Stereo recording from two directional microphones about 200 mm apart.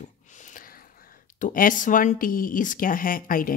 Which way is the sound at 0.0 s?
40° left (ahead or behind).